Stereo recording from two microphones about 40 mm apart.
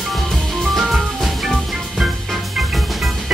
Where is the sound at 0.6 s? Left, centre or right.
Centre.